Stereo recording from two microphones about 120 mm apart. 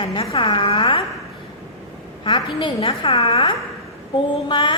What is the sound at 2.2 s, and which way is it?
A woman's voice, 40° left (ahead or behind).